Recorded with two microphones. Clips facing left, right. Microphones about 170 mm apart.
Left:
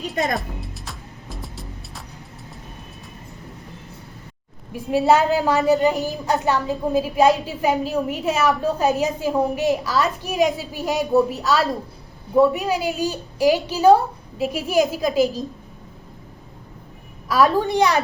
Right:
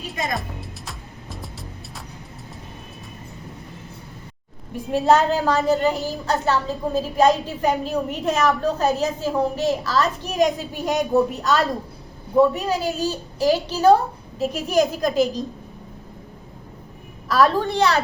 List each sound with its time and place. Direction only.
0.9 s music: centre (ahead or behind)
4.7 s a woman's voice: 10° left (ahead or behind)
12.5 s a woman's voice: 10° left (ahead or behind)
17.2 s a woman's voice: 15° left (ahead or behind)